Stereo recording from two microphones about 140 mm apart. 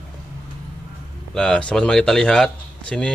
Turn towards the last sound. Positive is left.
turn(degrees=5)  # may be behind; listen again after turning